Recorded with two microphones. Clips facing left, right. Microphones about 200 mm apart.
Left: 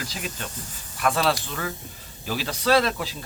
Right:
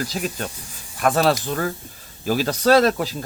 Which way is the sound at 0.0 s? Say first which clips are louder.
Right 7 dB; 45° right (ahead or behind).